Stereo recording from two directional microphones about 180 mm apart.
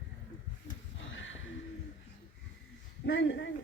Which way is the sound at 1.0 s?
90° left.